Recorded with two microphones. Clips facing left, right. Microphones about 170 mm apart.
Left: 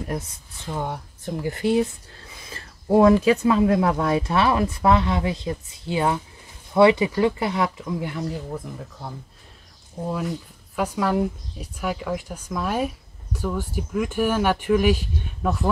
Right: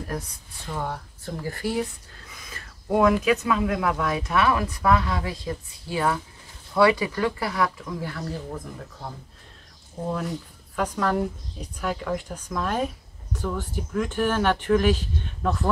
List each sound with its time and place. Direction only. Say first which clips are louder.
0.1 s speech: left 3 dB; 20° left (ahead or behind)
8.5 s speech: left 2 dB; 5° left (ahead or behind)
10.8 s speech: left 2 dB; 10° left (ahead or behind)